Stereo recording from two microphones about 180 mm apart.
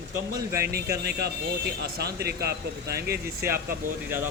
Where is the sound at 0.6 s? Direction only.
60° right (ahead or behind).